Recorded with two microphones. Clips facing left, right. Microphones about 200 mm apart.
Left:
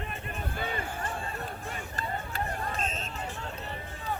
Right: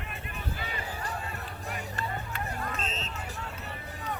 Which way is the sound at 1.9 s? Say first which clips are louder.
Left 4 dB; 35° left (ahead or behind).